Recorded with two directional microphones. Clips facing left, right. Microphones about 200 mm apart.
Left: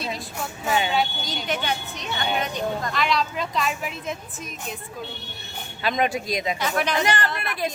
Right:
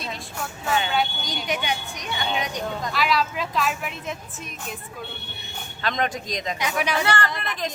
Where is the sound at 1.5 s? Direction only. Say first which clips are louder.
Even; 15° right (ahead or behind).